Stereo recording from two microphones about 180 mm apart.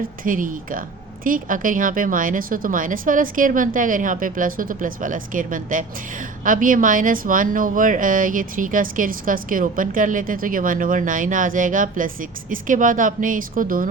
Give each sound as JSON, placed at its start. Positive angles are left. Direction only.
{"t": 0.3, "sound": "speech", "side_deg": -50}